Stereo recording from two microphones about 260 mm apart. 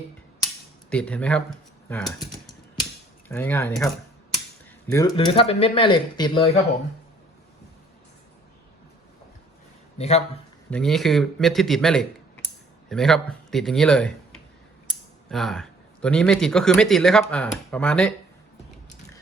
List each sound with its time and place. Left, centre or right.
0.9 s speech: centre
4.9 s speech: centre
10.0 s speech: left
10.7 s speech: centre
15.3 s speech: centre